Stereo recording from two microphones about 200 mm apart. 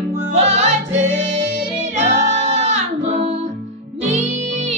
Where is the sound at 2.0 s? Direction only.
35° right (ahead or behind).